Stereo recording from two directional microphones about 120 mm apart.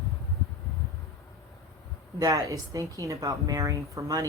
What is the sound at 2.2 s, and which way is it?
A woman's voice, 30° right (ahead or behind).